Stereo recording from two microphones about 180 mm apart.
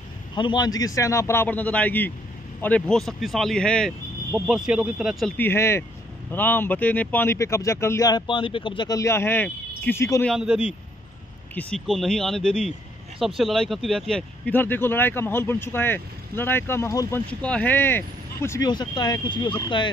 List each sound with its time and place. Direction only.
0.3 s speech: 25° left (ahead or behind); by 5.3 s 5° right (ahead or behind)
5.4 s speech: 15° left (ahead or behind)
10.2 s speech: centre (ahead or behind); by 17.2 s 15° left (ahead or behind)
17.3 s speech: 5° left (ahead or behind); by 19.9 s 25° left (ahead or behind)